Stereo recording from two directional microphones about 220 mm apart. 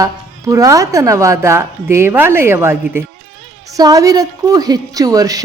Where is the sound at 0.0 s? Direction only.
15° right (ahead or behind).